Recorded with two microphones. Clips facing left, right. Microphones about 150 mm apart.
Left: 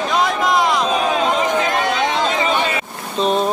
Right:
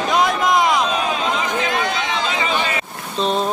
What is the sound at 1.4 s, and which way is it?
Chatter, 45° left (ahead or behind).